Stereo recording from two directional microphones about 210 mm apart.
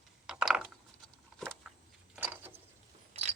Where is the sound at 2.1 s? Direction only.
10° right (ahead or behind).